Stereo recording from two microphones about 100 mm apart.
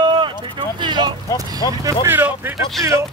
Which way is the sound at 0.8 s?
50° right (ahead or behind).